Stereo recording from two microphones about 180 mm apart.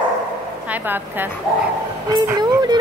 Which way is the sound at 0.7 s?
10° right (ahead or behind).